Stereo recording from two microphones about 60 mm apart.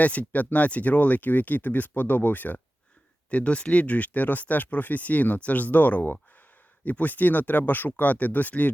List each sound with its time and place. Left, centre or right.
0.0 s speech: left